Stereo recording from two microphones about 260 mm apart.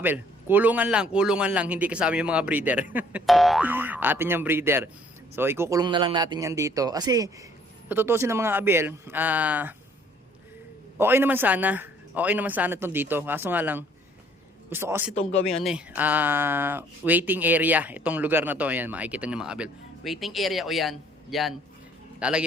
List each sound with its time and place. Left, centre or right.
0.0 s speech: centre
10.9 s speech: centre
15.1 s speech: left
15.6 s speech: centre